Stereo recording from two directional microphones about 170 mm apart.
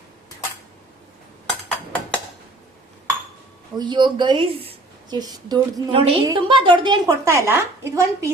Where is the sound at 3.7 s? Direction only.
25° right (ahead or behind).